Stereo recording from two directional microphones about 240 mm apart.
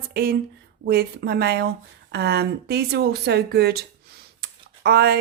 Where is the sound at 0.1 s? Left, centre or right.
Right.